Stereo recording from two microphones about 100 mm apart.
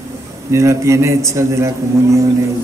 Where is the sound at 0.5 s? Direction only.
30° right (ahead or behind).